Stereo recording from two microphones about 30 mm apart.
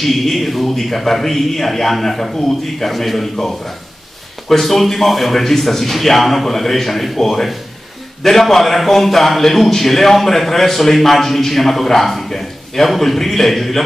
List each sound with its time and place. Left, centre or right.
0.0 s a man's voice: centre